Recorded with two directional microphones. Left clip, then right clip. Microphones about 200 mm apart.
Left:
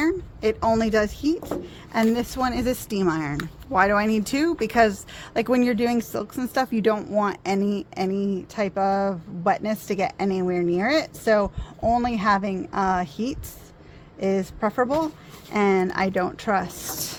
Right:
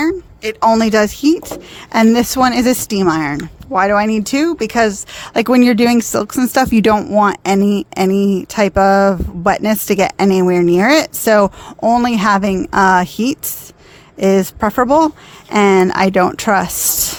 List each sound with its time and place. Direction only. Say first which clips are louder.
0.0 s speech: right 5 dB; 35° right (ahead or behind)